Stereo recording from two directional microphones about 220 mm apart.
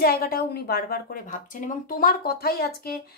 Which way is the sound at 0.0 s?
45° left (ahead or behind).